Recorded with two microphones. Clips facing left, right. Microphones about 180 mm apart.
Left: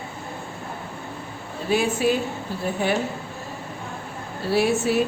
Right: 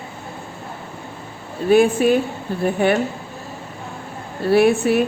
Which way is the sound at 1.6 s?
55° right (ahead or behind).